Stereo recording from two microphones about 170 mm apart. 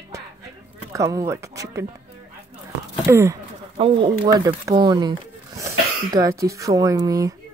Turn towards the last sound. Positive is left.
turn(degrees=-20)  # may be behind; listen again after turning